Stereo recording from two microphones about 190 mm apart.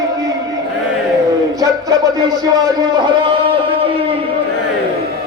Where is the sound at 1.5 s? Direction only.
20° right (ahead or behind).